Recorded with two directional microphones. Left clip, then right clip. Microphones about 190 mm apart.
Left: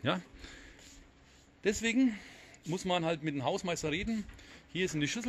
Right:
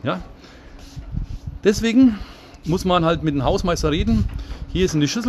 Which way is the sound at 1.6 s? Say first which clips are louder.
Right 14 dB; 5° right (ahead or behind).